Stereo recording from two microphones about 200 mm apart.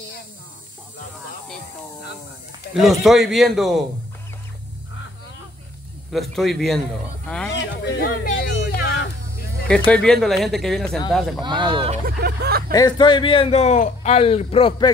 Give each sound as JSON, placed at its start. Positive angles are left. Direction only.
{"t": 2.7, "sound": "speech", "side_deg": 0}
{"t": 6.1, "sound": "speech", "side_deg": 0}
{"t": 7.5, "sound": "a sound", "side_deg": 60}
{"t": 9.8, "sound": "speech", "side_deg": 5}
{"t": 11.4, "sound": "speech", "side_deg": -25}
{"t": 12.2, "sound": "speech", "side_deg": -50}
{"t": 12.7, "sound": "a man's voice", "side_deg": 20}